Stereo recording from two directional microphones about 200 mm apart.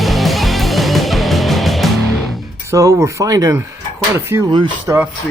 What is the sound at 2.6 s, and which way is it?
Speech, 15° right (ahead or behind).